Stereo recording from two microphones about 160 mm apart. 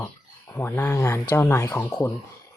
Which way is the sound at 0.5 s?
15° left (ahead or behind).